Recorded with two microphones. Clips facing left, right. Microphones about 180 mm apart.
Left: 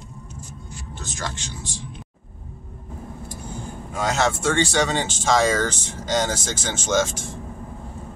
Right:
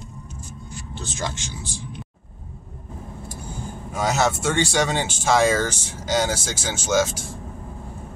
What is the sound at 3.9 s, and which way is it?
Speech, 5° right (ahead or behind).